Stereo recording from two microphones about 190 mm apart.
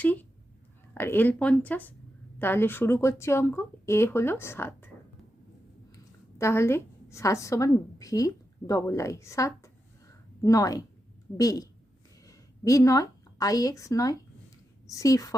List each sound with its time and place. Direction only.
0.0 s a sound: 10° left (ahead or behind)
0.9 s a woman's voice: 10° left (ahead or behind)
6.4 s a woman's voice: 15° left (ahead or behind)